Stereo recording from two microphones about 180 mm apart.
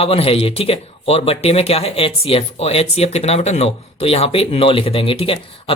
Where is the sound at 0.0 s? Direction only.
35° left (ahead or behind).